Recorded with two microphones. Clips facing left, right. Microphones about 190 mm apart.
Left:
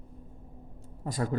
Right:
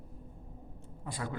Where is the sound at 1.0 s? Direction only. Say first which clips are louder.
Left 8 dB; 40° left (ahead or behind).